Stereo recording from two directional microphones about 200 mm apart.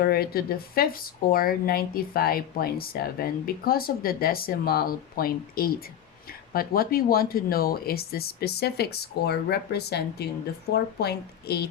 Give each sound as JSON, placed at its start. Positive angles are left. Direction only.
{"t": 0.0, "sound": "speech", "side_deg": 50}